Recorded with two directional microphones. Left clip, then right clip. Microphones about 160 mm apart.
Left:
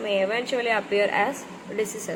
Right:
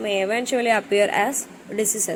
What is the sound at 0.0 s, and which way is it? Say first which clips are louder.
A woman's voice: right 2 dB; 55° right (ahead or behind).